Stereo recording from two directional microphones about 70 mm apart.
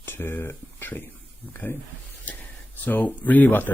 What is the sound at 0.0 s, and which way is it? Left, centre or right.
Speech, left.